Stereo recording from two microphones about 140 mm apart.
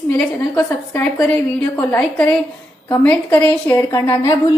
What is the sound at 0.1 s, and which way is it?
A woman's voice, 20° left (ahead or behind).